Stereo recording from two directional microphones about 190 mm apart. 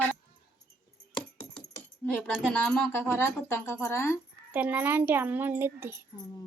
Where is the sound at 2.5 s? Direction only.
10° left (ahead or behind).